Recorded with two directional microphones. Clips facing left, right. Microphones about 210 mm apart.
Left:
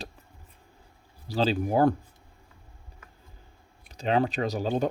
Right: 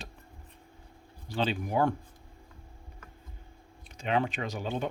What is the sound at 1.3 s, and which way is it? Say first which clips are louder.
Speech: left 5 dB; 35° left (ahead or behind).